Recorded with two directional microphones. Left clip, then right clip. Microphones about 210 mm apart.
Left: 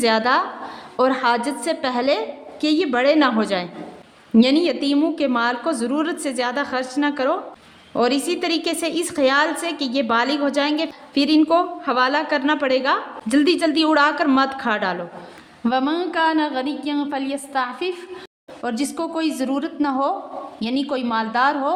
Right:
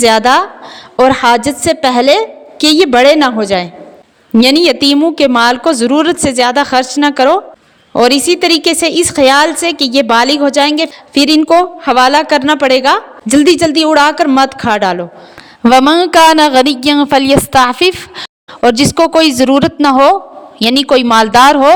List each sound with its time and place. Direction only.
0.0 s a woman's voice: 40° right (ahead or behind)
4.4 s a woman's voice: 40° right (ahead or behind)
15.6 s a woman's voice: 55° right (ahead or behind)